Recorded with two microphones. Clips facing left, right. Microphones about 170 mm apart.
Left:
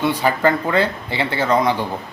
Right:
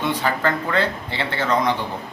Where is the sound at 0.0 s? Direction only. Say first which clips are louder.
Left 4 dB; 10° left (ahead or behind).